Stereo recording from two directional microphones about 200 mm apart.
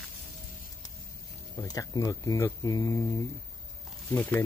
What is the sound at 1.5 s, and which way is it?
Speech, 20° left (ahead or behind).